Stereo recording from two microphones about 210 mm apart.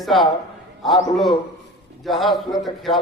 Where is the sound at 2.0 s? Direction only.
Centre (ahead or behind).